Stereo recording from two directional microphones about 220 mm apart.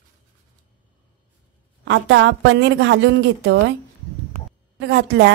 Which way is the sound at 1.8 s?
55° right (ahead or behind).